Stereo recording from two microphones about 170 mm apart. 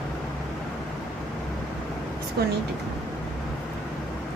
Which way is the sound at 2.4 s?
70° right (ahead or behind).